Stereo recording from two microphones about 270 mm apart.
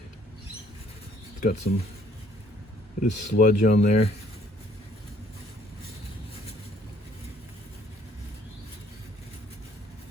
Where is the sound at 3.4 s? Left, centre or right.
Left.